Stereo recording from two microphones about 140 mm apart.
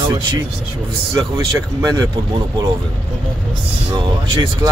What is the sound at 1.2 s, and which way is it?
Speech, 25° right (ahead or behind).